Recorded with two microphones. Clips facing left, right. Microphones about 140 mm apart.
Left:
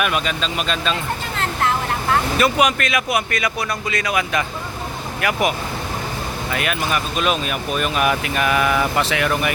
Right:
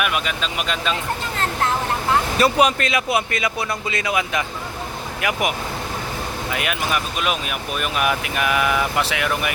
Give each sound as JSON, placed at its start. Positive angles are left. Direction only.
{"t": 0.0, "sound": "speech", "side_deg": -5}
{"t": 2.4, "sound": "speech", "side_deg": -30}
{"t": 6.5, "sound": "speech", "side_deg": -15}